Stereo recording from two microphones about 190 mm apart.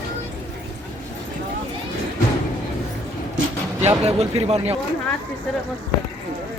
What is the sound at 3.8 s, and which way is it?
Speech, 35° right (ahead or behind).